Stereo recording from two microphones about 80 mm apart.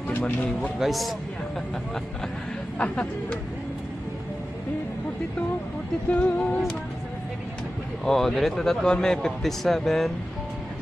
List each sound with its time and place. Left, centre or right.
0.1 s speech: left
0.7 s speech: centre
2.8 s speech: centre
6.0 s speech: centre
8.0 s speech: centre